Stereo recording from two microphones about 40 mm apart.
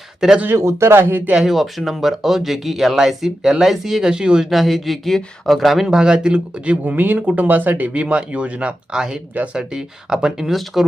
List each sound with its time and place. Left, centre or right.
0.4 s speech: right
1.4 s speech: centre; by 4.4 s right
4.4 s speech: centre
5.9 s speech: right
6.7 s speech: right
8.9 s speech: centre
9.3 s speech: right
9.6 s speech: centre
10.5 s speech: centre